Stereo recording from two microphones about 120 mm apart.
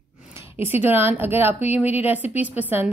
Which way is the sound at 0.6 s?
15° right (ahead or behind).